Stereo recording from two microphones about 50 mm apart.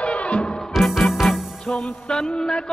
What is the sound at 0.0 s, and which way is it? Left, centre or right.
Music, left.